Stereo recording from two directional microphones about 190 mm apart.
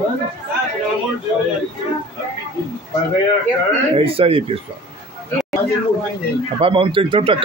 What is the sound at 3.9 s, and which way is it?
Speech, 30° right (ahead or behind).